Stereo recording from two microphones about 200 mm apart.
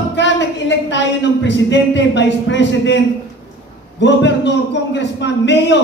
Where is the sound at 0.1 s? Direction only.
60° left (ahead or behind).